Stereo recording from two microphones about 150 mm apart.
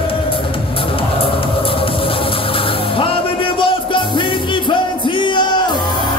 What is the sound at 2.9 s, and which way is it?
Music, 35° left (ahead or behind).